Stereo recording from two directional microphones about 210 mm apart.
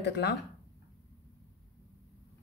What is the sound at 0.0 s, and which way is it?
Speech, 50° left (ahead or behind).